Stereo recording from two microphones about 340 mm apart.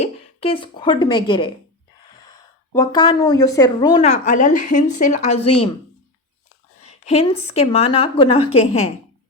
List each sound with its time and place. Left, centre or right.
0.0 s speech: centre
2.7 s speech: centre
6.8 s speech: centre